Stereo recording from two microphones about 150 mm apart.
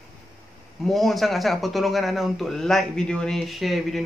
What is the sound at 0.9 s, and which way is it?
Speech, centre (ahead or behind).